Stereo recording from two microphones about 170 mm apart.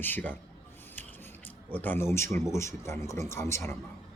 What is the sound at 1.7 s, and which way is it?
Speech, 10° left (ahead or behind).